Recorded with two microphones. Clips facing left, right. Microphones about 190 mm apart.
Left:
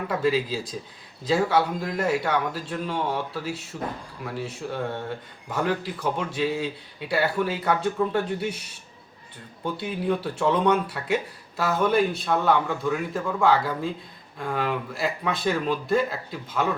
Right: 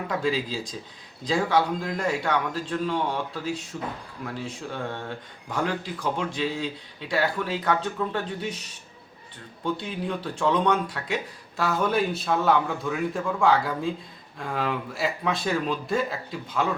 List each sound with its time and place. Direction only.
0.1 s speech: 5° left (ahead or behind)
9.6 s speech: 10° left (ahead or behind)